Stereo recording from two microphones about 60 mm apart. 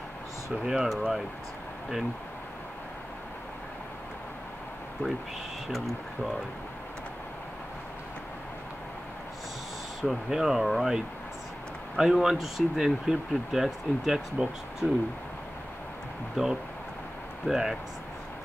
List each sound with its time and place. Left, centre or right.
0.7 s speech: centre
5.0 s speech: left
5.7 s speech: centre
10.0 s speech: centre
12.0 s speech: centre
16.4 s speech: centre